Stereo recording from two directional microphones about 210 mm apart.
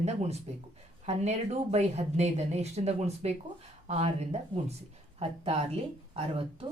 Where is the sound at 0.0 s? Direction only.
30° right (ahead or behind).